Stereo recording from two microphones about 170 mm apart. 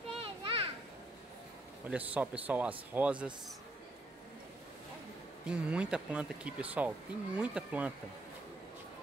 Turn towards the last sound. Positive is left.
turn(degrees=-5)  # may be behind; listen again after turning